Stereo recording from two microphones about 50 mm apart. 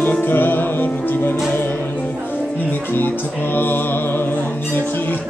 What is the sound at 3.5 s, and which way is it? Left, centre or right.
Music, left.